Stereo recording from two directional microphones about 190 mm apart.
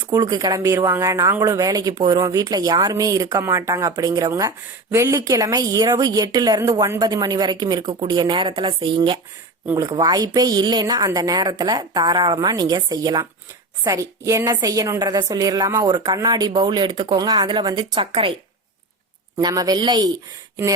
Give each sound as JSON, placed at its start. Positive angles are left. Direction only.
{"t": 0.1, "sound": "speech", "side_deg": -20}
{"t": 19.4, "sound": "speech", "side_deg": -20}